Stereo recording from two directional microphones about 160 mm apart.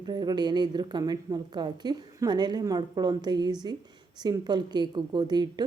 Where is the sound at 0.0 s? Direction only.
25° right (ahead or behind).